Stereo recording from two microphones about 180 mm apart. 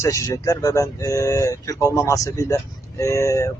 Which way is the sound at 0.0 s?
15° left (ahead or behind).